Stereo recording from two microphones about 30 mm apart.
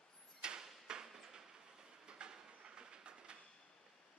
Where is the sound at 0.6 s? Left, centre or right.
Right.